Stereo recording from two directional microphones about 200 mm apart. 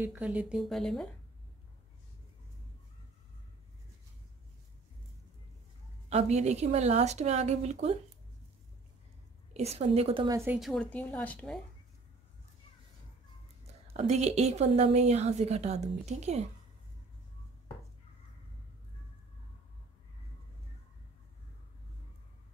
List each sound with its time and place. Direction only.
0.0 s speech: 5° right (ahead or behind)
6.0 s a woman's voice: 30° right (ahead or behind)
9.5 s a woman's voice: 30° right (ahead or behind)
10.3 s a woman's voice: 10° right (ahead or behind)
10.6 s a woman's voice: 5° left (ahead or behind)
13.9 s a woman's voice: 35° right (ahead or behind)